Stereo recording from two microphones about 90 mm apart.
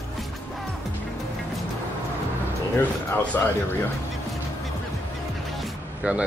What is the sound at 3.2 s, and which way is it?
Speech, 15° left (ahead or behind).